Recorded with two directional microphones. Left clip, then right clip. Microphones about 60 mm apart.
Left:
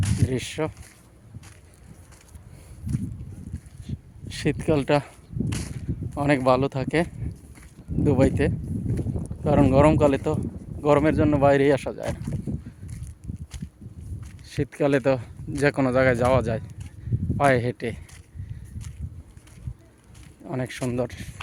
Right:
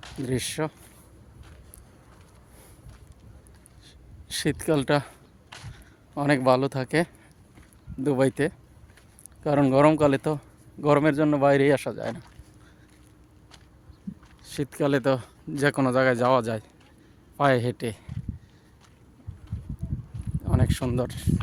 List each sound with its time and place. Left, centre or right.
0.3 s speech: centre
3.8 s speech: centre
14.4 s speech: left
16.3 s speech: centre
20.4 s speech: centre